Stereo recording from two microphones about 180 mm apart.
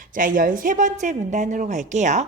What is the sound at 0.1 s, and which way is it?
A woman's voice, 50° right (ahead or behind).